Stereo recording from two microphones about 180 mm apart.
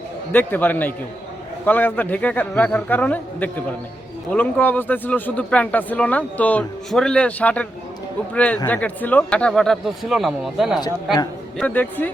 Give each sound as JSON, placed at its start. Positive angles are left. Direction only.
{"t": 0.3, "sound": "a man's voice", "side_deg": 10}
{"t": 10.8, "sound": "speech", "side_deg": 20}
{"t": 11.5, "sound": "a man's voice", "side_deg": 10}